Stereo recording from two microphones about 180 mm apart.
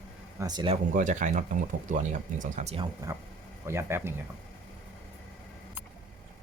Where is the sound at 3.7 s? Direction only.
15° right (ahead or behind).